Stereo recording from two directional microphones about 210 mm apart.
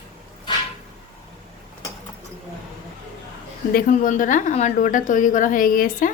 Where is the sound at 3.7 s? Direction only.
40° left (ahead or behind).